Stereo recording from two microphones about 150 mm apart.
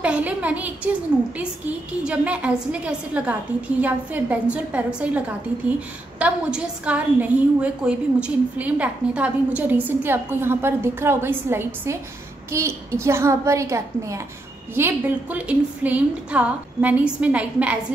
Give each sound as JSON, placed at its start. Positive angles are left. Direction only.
{"t": 0.0, "sound": "a woman's voice", "side_deg": -10}
{"t": 2.0, "sound": "a woman's voice", "side_deg": -10}